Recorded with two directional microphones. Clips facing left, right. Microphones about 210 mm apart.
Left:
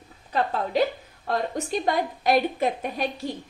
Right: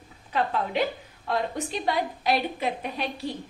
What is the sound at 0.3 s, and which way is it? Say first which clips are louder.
A woman's voice: left 2 dB; 40° left (ahead or behind).